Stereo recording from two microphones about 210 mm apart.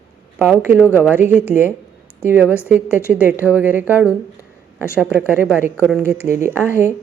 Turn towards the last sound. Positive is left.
turn(degrees=-10)  # may be behind; listen again after turning